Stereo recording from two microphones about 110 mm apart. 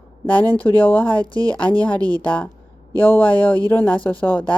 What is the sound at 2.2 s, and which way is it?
Speech, 15° left (ahead or behind).